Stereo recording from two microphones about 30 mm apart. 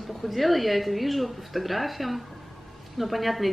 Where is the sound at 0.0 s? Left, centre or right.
Centre.